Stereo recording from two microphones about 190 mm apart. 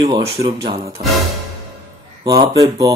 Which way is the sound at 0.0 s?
25° right (ahead or behind).